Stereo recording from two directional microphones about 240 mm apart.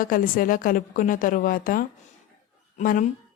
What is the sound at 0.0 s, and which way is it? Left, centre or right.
A woman's voice, left.